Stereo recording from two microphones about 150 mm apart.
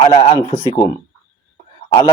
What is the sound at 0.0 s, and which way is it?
Speech, 40° left (ahead or behind).